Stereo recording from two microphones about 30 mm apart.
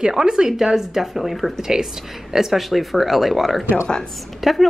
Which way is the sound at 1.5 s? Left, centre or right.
Centre.